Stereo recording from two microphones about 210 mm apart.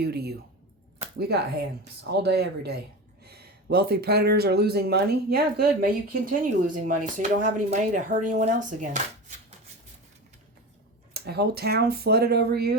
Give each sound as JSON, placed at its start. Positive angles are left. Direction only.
{"t": 0.0, "sound": "speech", "side_deg": -50}
{"t": 11.1, "sound": "speech", "side_deg": -50}